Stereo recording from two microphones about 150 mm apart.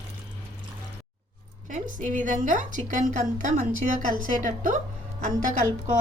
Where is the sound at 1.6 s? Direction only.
60° right (ahead or behind).